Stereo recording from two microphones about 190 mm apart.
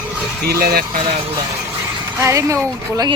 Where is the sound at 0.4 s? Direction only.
55° right (ahead or behind).